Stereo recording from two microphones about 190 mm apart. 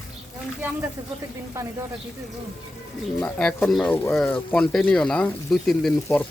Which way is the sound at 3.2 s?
5° left (ahead or behind).